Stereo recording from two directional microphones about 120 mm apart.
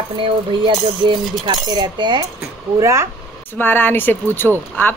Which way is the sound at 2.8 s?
25° right (ahead or behind).